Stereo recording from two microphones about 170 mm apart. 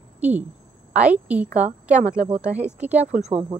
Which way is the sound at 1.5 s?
45° right (ahead or behind).